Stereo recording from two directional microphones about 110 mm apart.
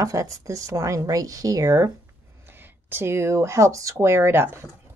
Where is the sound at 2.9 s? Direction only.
25° right (ahead or behind).